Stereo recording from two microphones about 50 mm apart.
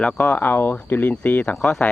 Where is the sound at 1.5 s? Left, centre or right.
Centre.